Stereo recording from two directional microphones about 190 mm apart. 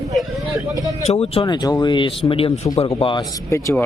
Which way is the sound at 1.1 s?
30° left (ahead or behind).